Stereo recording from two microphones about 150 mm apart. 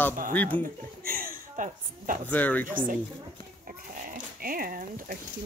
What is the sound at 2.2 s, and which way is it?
Speech, 10° left (ahead or behind).